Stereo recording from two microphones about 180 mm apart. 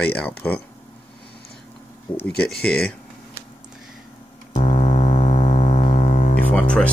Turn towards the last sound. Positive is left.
turn(degrees=5)  # may be behind; listen again after turning